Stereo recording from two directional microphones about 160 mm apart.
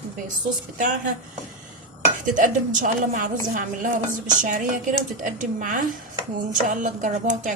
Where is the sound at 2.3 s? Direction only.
55° right (ahead or behind).